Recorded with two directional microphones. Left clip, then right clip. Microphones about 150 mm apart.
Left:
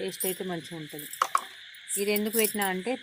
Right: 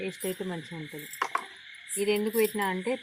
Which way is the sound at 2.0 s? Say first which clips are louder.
Right 1 dB; 55° left (ahead or behind).